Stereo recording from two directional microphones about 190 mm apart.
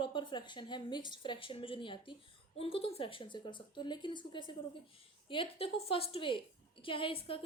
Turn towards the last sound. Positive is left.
turn(degrees=30)  # may be behind; listen again after turning